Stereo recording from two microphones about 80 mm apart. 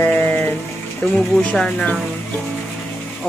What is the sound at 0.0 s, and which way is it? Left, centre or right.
Music, left.